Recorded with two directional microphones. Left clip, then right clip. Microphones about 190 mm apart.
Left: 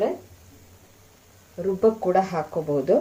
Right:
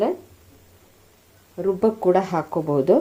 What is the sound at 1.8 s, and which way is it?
Speech, 45° right (ahead or behind).